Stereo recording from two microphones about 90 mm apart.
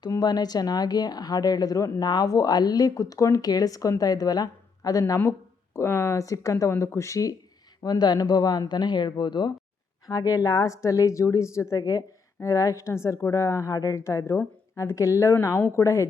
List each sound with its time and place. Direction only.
0.1 s a woman's voice: 50° left (ahead or behind)
7.9 s speech: 50° left (ahead or behind)
10.1 s a woman's voice: 40° left (ahead or behind)